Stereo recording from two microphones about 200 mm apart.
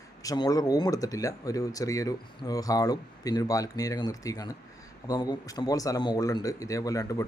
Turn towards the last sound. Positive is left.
turn(degrees=15)  # may be behind; listen again after turning